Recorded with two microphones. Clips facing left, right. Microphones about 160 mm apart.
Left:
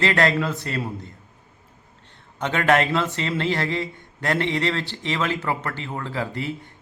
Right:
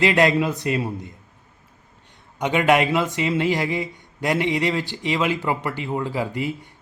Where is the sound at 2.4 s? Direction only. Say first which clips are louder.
Right 2 dB; 10° right (ahead or behind).